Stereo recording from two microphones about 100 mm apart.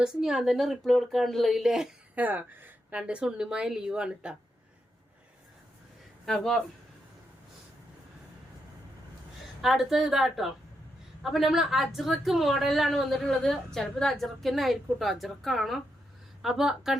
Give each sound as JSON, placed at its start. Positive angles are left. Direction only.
{"t": 0.0, "sound": "a woman's voice", "side_deg": -5}
{"t": 2.1, "sound": "speech", "side_deg": -15}
{"t": 6.2, "sound": "a woman's voice", "side_deg": 5}
{"t": 9.6, "sound": "a woman's voice", "side_deg": -5}